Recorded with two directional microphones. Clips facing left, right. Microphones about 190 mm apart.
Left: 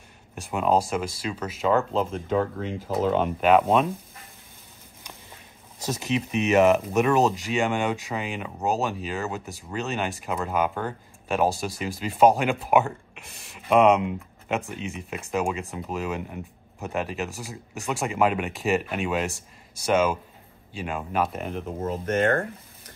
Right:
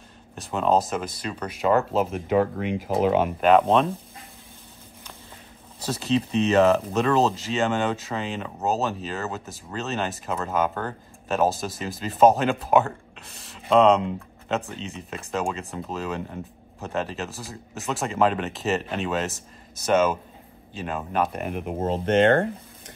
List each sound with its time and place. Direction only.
0.4 s speech: 10° left (ahead or behind)
5.8 s speech: 15° left (ahead or behind)
21.5 s speech: 15° right (ahead or behind)
21.8 s speech: 30° right (ahead or behind)